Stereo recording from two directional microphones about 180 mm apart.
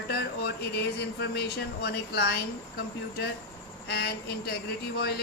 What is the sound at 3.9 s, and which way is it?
Speech, 65° left (ahead or behind).